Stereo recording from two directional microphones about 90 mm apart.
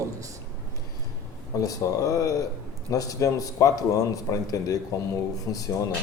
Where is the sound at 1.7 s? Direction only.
40° left (ahead or behind).